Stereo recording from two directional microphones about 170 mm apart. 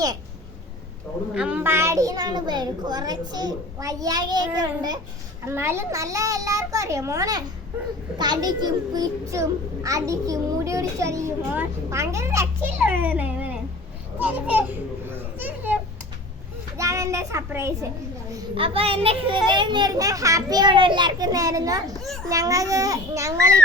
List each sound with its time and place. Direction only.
1.3 s a child's voice: 5° right (ahead or behind)
18.5 s a child's voice: 35° right (ahead or behind)